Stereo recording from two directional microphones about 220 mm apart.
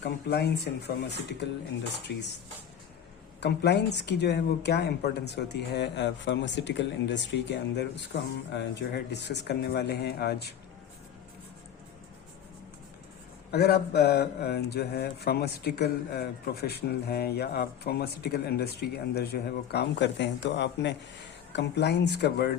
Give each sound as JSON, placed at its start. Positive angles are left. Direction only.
{"t": 0.0, "sound": "speech", "side_deg": 50}
{"t": 3.4, "sound": "speech", "side_deg": 50}
{"t": 13.5, "sound": "speech", "side_deg": 45}